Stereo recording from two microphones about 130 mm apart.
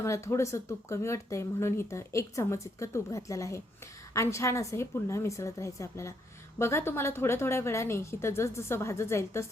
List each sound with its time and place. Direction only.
0.0 s speech: 20° left (ahead or behind)